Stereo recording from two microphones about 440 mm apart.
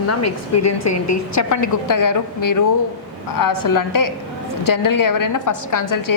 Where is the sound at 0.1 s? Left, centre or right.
Left.